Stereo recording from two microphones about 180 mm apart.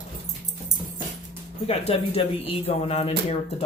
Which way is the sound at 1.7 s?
35° left (ahead or behind).